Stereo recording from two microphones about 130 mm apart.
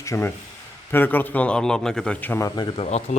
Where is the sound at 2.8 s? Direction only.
55° left (ahead or behind).